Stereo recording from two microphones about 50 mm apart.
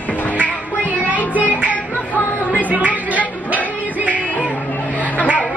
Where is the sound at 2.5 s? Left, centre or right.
Right.